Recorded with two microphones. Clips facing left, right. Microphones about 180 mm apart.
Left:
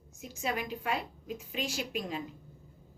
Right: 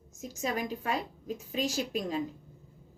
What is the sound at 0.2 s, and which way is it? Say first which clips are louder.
A woman's voice: right 2 dB; 40° right (ahead or behind).